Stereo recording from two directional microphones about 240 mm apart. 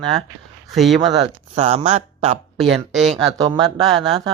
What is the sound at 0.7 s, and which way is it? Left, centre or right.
Speech, centre.